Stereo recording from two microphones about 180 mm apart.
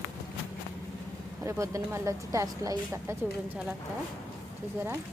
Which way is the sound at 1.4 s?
15° right (ahead or behind).